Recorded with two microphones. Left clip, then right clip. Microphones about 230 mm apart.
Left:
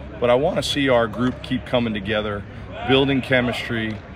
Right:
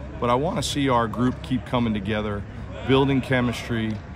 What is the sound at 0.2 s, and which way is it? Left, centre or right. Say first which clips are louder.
Speech: left 5 dB; right.